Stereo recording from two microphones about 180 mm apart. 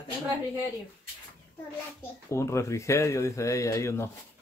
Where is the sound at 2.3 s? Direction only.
15° left (ahead or behind).